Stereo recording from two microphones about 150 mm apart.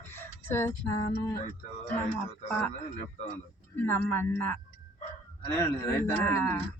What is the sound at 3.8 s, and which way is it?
Speech, 15° left (ahead or behind).